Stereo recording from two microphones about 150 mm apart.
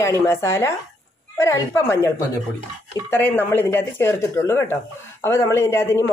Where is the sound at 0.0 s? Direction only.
20° left (ahead or behind).